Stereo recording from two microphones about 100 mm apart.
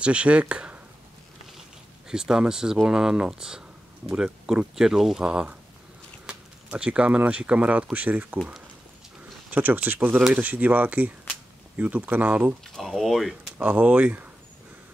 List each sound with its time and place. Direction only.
0.0 s speech: 10° right (ahead or behind)
2.0 s speech: 5° right (ahead or behind)
9.5 s speech: 20° right (ahead or behind)
12.7 s speech: centre (ahead or behind)
13.6 s speech: 15° right (ahead or behind)